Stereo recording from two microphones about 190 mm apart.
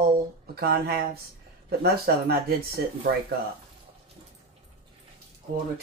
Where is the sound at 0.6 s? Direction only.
55° right (ahead or behind).